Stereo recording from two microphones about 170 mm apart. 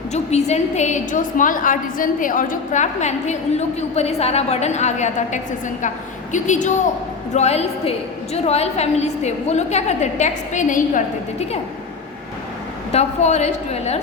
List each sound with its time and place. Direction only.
0.1 s a woman's voice: 40° left (ahead or behind)
12.9 s a woman's voice: 40° left (ahead or behind)